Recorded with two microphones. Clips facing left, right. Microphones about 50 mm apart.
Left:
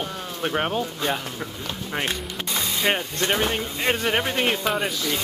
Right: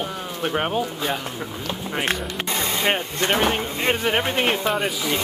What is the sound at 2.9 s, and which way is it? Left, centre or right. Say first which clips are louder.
Speech: right 1 dB; centre.